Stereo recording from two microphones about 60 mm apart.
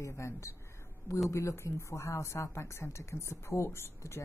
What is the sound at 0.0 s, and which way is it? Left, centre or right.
A woman's voice, left.